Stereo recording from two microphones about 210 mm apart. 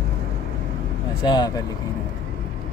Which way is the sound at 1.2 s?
20° left (ahead or behind).